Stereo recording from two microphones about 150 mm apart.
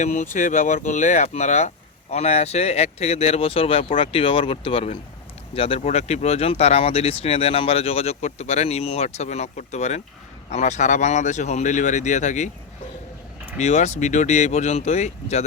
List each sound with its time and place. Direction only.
0.0 s speech: 55° left (ahead or behind)
13.6 s speech: 50° left (ahead or behind)